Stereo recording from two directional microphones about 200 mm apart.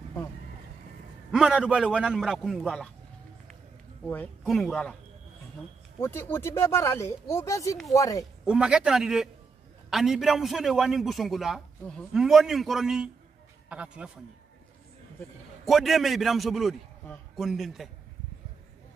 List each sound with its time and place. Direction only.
1.3 s a man's voice: 5° right (ahead or behind)
4.0 s a man's voice: 10° left (ahead or behind)
5.9 s speech: 10° left (ahead or behind)
8.5 s a man's voice: 5° right (ahead or behind)
15.6 s a man's voice: centre (ahead or behind)